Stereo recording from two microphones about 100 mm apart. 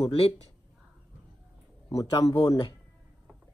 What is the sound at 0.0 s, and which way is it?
Speech, 70° left (ahead or behind).